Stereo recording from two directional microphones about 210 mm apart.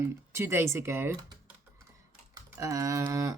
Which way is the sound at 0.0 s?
10° right (ahead or behind).